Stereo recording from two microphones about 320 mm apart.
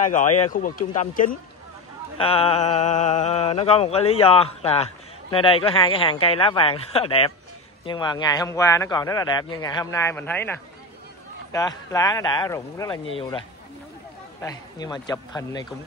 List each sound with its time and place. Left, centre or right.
0.0 s a sound: left
5.3 s a man's voice: centre
14.4 s a man's voice: centre